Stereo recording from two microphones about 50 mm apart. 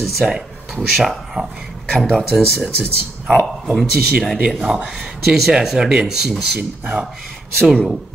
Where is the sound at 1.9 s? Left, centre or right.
Centre.